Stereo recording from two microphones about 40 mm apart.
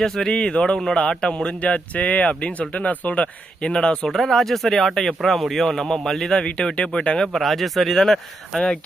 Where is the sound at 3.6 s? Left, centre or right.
Left.